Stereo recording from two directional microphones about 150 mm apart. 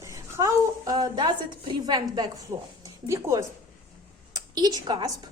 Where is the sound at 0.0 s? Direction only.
20° right (ahead or behind).